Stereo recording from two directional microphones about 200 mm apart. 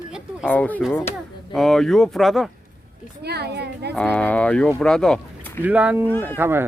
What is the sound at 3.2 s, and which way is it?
Speech, 55° right (ahead or behind).